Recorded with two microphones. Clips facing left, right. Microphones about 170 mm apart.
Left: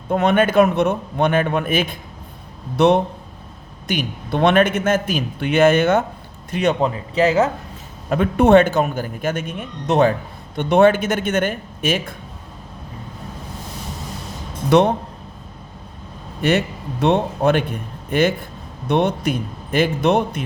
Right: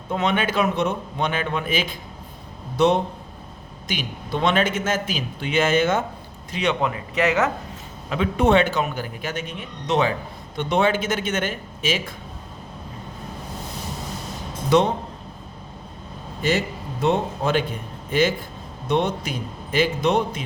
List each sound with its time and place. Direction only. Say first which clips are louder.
0.1 s a man's voice: left 7 dB; 50° left (ahead or behind)
6.5 s speech: left 5 dB; 50° left (ahead or behind)
6.8 s speech: left 4 dB; 30° left (ahead or behind)
8.1 s a man's voice: left 6 dB; 50° left (ahead or behind)
14.7 s speech: left 4 dB; 60° left (ahead or behind)
16.4 s a man's voice: left 4 dB; 65° left (ahead or behind)